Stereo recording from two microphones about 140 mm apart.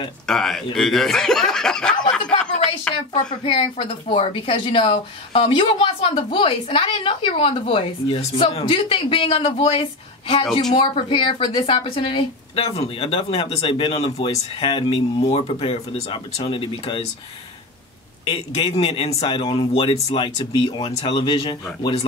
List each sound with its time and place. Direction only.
0.3 s speech: 5° left (ahead or behind)
3.4 s speech: 40° left (ahead or behind)
18.3 s a man's voice: 40° left (ahead or behind)